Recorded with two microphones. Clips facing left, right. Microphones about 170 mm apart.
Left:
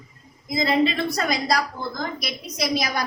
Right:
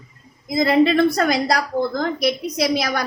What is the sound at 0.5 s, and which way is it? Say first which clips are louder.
A woman's voice: right 6 dB; 60° right (ahead or behind).